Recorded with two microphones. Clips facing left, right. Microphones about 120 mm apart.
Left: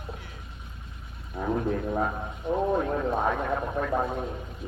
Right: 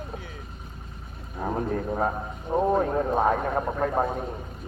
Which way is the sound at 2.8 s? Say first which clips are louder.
Right 3 dB; 45° right (ahead or behind).